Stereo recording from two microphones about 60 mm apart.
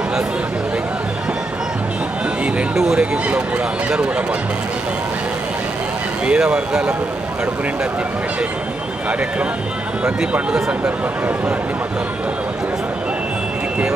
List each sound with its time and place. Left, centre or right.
2.7 s speech: centre
6.2 s speech: centre